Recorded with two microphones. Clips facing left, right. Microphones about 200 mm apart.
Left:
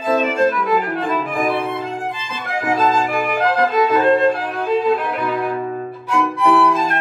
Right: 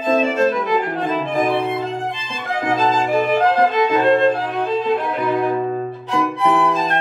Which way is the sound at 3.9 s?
25° right (ahead or behind).